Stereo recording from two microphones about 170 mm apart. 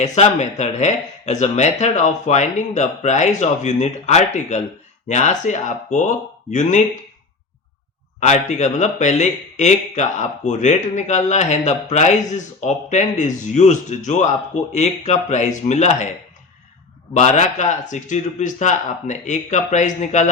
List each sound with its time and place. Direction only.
0.0 s speech: 40° left (ahead or behind)
8.2 s speech: 45° left (ahead or behind)
17.2 s speech: 45° left (ahead or behind)